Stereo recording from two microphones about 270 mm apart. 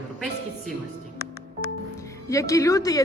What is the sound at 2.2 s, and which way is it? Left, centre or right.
Speech, centre.